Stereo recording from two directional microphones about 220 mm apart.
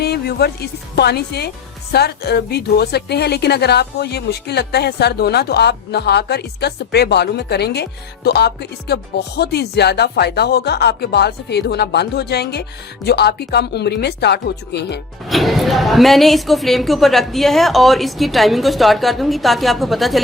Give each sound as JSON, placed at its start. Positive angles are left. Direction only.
{"t": 0.0, "sound": "a woman's voice", "side_deg": 45}
{"t": 15.3, "sound": "a woman's voice", "side_deg": 0}